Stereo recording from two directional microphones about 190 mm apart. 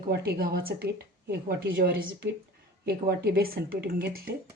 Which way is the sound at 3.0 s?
55° right (ahead or behind).